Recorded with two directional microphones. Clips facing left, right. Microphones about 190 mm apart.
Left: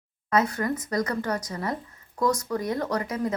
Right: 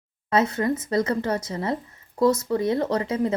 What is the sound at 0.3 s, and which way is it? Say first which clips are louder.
A woman's voice: right 3 dB; 25° right (ahead or behind).